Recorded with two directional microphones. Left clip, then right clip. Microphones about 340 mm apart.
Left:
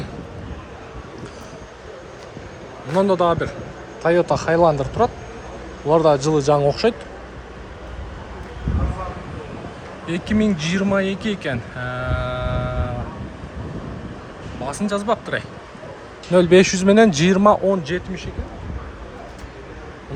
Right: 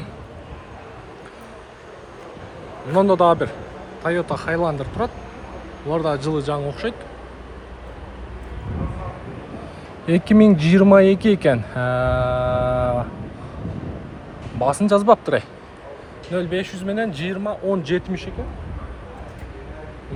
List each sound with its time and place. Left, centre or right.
2.9 s a man's voice: centre
10.1 s speech: centre
14.6 s speech: centre
16.3 s speech: centre
17.7 s a man's voice: centre